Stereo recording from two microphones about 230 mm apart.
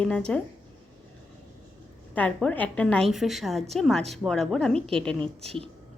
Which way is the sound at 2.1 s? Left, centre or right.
Centre.